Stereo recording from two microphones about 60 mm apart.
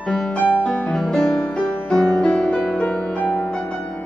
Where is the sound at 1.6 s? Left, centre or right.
Left.